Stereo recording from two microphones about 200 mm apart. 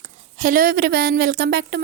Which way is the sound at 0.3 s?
45° right (ahead or behind).